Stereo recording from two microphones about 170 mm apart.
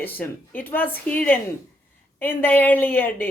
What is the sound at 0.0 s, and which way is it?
A woman's voice, 10° left (ahead or behind).